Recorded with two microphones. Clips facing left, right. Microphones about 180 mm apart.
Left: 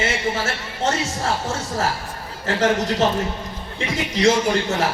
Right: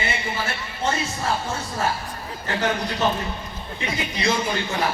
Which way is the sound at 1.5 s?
90° left.